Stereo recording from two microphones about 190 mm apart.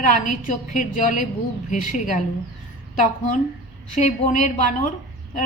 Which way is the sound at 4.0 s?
40° left (ahead or behind).